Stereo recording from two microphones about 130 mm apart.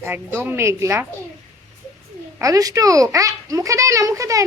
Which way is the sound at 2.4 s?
25° right (ahead or behind).